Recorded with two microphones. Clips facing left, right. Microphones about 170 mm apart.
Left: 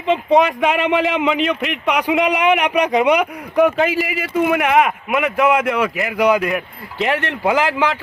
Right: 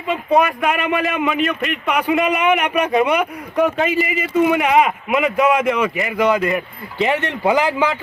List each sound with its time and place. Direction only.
0.3 s speech: 20° left (ahead or behind)
3.6 s a man's voice: 5° left (ahead or behind)